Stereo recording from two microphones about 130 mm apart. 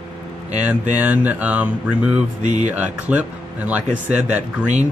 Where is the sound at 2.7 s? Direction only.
10° right (ahead or behind).